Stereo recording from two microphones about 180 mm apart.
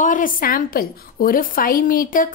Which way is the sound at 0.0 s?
50° left (ahead or behind).